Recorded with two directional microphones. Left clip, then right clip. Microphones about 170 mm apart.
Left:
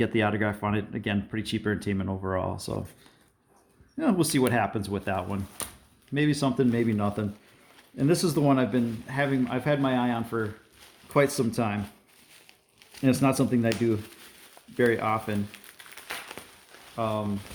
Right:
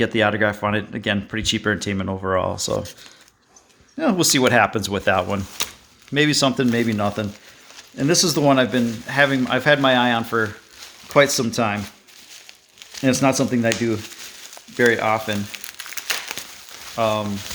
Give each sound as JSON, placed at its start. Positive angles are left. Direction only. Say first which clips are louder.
{"t": 0.0, "sound": "speech", "louder": "right 8 dB", "side_deg": -15}
{"t": 3.9, "sound": "speech", "louder": "right 7 dB", "side_deg": -20}
{"t": 11.1, "sound": "speech", "louder": "right 8 dB", "side_deg": -20}
{"t": 13.0, "sound": "speech", "louder": "right 6 dB", "side_deg": -15}
{"t": 16.3, "sound": "a sound", "louder": "right 11 dB", "side_deg": -30}
{"t": 16.9, "sound": "speech", "louder": "right 9 dB", "side_deg": -35}